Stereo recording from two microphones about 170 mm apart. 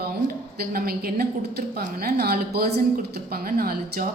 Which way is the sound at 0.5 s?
65° right (ahead or behind).